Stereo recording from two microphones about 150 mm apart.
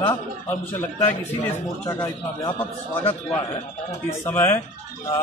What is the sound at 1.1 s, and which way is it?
A man's voice, 15° left (ahead or behind).